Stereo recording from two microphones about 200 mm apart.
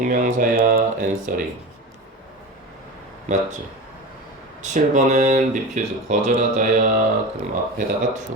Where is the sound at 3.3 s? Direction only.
35° right (ahead or behind).